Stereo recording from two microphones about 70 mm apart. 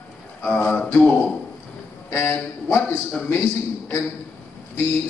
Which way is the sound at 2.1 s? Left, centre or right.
Left.